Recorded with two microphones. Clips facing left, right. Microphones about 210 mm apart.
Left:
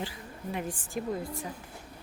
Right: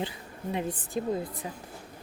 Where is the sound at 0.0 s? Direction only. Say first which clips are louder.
Right 3 dB; 25° right (ahead or behind).